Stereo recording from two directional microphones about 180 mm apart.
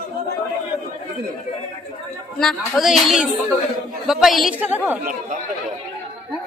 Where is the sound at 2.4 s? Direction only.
Centre (ahead or behind).